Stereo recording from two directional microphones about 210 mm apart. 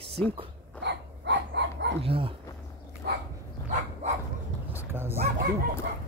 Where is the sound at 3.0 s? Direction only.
45° right (ahead or behind).